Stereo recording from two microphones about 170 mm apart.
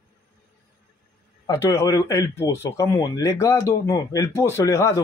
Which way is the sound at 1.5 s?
15° left (ahead or behind).